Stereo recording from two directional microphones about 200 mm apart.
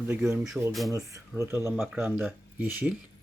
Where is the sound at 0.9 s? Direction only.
15° right (ahead or behind).